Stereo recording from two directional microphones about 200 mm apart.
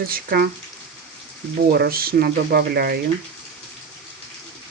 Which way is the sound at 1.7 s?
50° right (ahead or behind).